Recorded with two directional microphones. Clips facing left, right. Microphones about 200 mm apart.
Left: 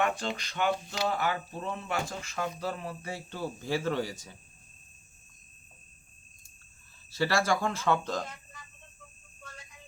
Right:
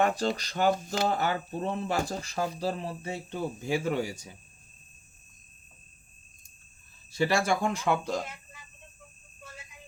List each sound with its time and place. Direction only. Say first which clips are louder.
0.0 s speech: right 4 dB; 40° right (ahead or behind); by 4.4 s 10° right (ahead or behind)
7.2 s speech: right 1 dB; 15° right (ahead or behind)
9.4 s whistle: right 2 dB; 5° right (ahead or behind)